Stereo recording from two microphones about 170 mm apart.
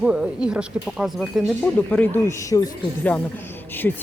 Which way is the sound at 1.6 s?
10° left (ahead or behind).